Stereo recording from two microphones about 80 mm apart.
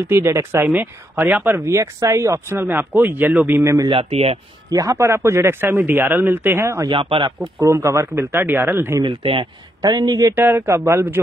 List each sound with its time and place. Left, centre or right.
0.1 s a man's voice: right
2.7 s speech: right
4.7 s speech: right
6.9 s speech: right
7.6 s a man's voice: right
9.0 s speech: right
9.8 s speech: right
10.3 s speech: right